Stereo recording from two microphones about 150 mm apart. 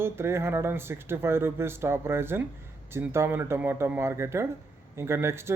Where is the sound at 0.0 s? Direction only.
15° right (ahead or behind).